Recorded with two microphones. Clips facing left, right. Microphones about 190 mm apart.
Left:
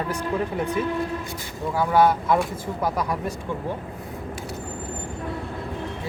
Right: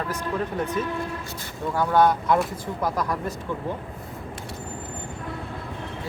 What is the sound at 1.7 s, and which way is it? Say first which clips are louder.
Speech: left 1 dB; 5° left (ahead or behind).